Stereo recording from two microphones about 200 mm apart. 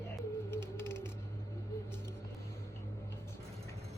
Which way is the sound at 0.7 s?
10° left (ahead or behind).